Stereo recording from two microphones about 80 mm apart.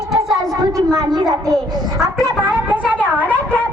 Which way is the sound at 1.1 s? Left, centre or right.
Right.